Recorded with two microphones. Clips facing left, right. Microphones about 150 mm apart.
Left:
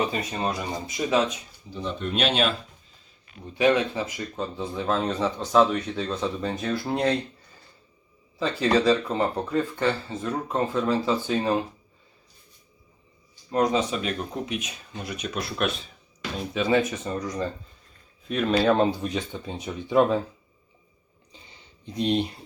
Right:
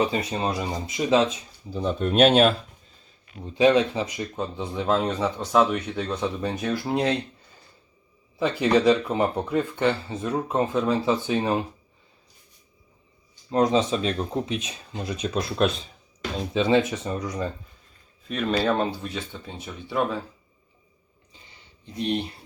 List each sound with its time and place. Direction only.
0.0 s speech: 25° right (ahead or behind)
1.7 s speech: 45° right (ahead or behind)
3.4 s speech: 25° right (ahead or behind)
8.4 s speech: 15° right (ahead or behind)
13.5 s speech: 30° right (ahead or behind)
18.3 s speech: centre (ahead or behind)
18.8 s speech: 15° left (ahead or behind)
21.9 s speech: 20° left (ahead or behind)